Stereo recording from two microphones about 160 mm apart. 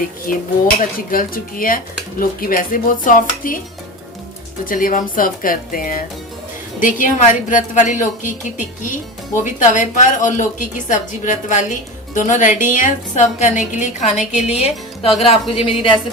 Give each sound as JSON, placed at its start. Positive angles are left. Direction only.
{"t": 0.3, "sound": "speech", "side_deg": 60}
{"t": 4.6, "sound": "a woman's voice", "side_deg": 60}